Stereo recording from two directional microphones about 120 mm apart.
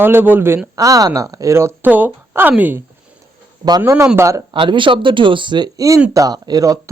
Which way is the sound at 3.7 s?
30° right (ahead or behind).